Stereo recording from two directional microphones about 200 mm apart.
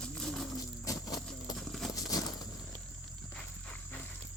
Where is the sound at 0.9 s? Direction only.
20° left (ahead or behind).